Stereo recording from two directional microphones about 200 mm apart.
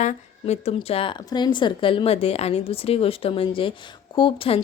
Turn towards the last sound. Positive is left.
turn(degrees=25)  # may be behind; listen again after turning